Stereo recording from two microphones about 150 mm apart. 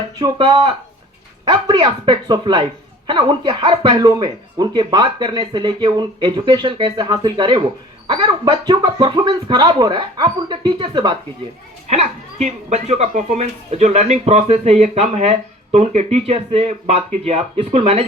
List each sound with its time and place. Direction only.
0.2 s speech: 30° right (ahead or behind)
11.9 s speech: 50° right (ahead or behind)